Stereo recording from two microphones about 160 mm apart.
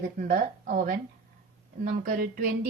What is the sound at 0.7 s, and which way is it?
A woman's voice, 65° right (ahead or behind).